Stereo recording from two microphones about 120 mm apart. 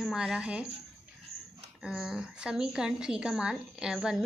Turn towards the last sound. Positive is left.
turn(degrees=-5)  # may be behind; listen again after turning